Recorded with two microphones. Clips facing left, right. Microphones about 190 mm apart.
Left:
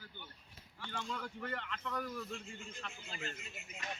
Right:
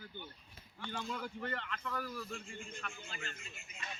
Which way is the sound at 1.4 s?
15° left (ahead or behind).